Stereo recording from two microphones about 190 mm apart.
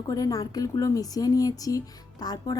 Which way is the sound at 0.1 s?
20° left (ahead or behind).